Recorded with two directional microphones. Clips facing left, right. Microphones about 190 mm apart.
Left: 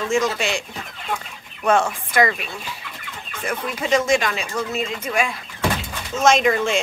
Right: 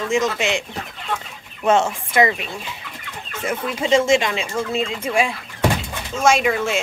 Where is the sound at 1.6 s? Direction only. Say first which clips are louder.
Right 1 dB; 25° right (ahead or behind).